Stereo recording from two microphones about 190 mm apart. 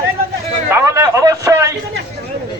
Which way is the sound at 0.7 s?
15° right (ahead or behind).